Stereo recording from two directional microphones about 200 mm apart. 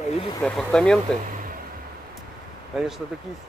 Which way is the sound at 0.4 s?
5° left (ahead or behind).